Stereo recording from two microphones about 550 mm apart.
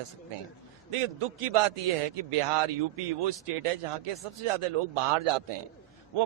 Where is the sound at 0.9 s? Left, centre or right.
Right.